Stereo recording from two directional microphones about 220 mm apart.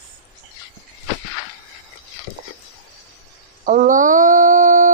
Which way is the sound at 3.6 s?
35° right (ahead or behind).